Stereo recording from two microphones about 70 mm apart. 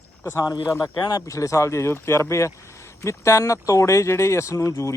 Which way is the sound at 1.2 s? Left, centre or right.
Left.